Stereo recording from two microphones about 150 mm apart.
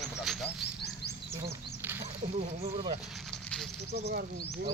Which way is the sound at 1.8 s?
15° right (ahead or behind).